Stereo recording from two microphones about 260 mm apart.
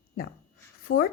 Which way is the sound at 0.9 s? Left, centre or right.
Left.